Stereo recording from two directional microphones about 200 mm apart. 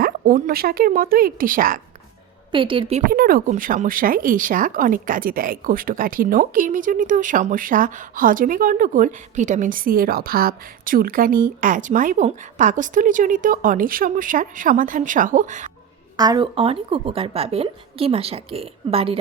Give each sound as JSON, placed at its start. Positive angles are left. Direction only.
{"t": 0.0, "sound": "speech", "side_deg": -45}
{"t": 2.5, "sound": "speech", "side_deg": -25}
{"t": 3.1, "sound": "speech", "side_deg": -50}
{"t": 16.1, "sound": "speech", "side_deg": -20}